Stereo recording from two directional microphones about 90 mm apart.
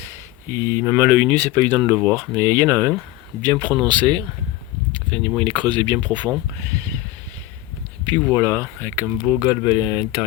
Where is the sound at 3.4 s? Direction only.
50° right (ahead or behind).